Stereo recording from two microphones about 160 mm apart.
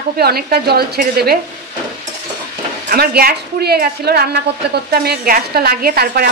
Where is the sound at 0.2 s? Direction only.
75° right (ahead or behind).